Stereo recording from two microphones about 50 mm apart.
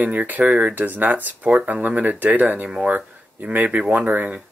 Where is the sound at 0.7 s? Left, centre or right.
Right.